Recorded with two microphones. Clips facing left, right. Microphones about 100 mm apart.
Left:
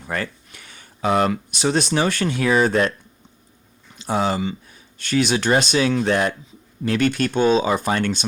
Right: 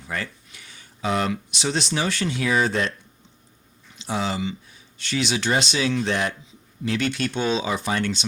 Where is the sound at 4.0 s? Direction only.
50° left (ahead or behind).